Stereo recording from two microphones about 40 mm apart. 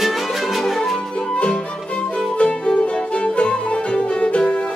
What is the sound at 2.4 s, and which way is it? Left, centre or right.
Music, left.